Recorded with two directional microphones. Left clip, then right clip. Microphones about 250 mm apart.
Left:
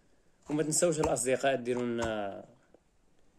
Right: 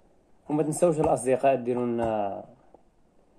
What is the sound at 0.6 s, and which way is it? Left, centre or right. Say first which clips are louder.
Speech: right 5 dB; centre.